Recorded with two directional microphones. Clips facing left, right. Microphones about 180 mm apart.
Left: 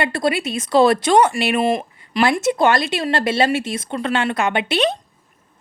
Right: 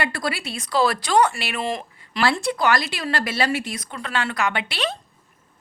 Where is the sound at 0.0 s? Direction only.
25° left (ahead or behind).